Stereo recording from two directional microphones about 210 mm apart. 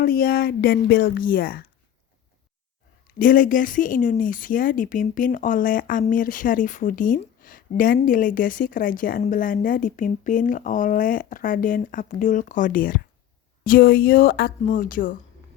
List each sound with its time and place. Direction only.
0.0 s a woman's voice: 45° left (ahead or behind)
3.2 s a woman's voice: 40° left (ahead or behind)